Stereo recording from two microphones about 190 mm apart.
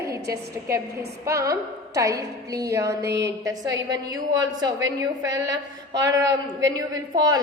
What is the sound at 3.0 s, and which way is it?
Speech, 65° right (ahead or behind).